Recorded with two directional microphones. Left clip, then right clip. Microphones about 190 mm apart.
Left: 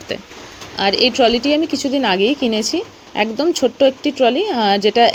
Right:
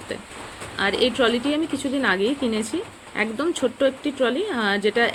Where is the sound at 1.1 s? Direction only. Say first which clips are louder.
Left 7 dB; 25° left (ahead or behind).